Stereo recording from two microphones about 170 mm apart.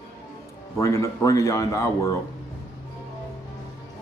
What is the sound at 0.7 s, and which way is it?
A man's voice, 15° left (ahead or behind).